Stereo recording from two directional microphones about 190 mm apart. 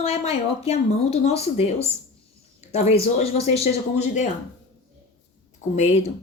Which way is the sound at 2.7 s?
35° left (ahead or behind).